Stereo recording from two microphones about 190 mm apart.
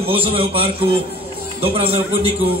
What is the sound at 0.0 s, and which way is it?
A man's voice, 30° right (ahead or behind).